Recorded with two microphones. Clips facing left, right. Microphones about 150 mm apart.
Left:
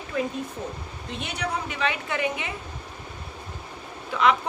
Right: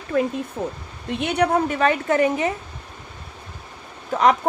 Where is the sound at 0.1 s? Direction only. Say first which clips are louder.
Right 6 dB; 50° right (ahead or behind).